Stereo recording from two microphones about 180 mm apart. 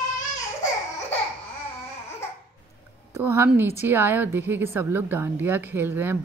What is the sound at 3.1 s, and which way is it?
Speech, 15° right (ahead or behind).